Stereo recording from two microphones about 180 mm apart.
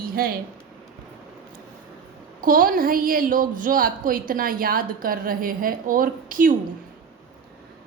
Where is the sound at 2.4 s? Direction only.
50° right (ahead or behind).